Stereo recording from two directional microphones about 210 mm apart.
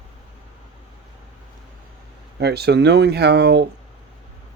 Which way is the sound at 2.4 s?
50° right (ahead or behind).